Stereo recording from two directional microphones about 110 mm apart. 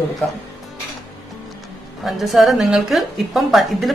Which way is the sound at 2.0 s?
Centre (ahead or behind).